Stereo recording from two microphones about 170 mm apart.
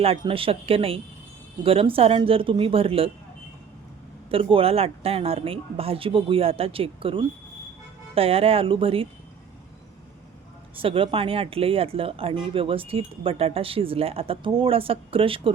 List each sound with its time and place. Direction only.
0.0 s speech: 35° right (ahead or behind)
4.3 s speech: 30° right (ahead or behind)
10.8 s speech: 30° right (ahead or behind)